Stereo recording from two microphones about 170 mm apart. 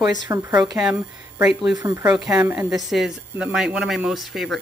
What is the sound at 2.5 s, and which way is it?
Speech, 15° right (ahead or behind).